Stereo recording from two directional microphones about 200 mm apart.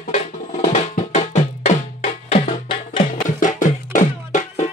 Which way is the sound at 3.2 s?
40° left (ahead or behind).